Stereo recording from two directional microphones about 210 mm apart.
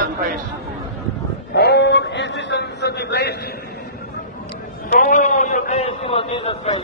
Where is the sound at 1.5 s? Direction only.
50° left (ahead or behind).